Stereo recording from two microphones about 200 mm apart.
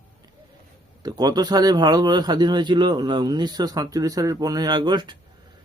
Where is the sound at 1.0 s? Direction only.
20° right (ahead or behind).